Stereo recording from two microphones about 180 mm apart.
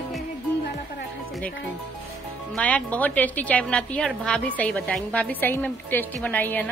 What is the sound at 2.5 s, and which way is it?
A woman's voice, 10° left (ahead or behind).